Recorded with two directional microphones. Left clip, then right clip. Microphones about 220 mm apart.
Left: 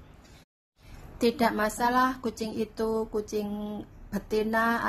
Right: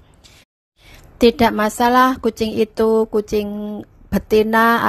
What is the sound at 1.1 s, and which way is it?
A woman's voice, 35° right (ahead or behind).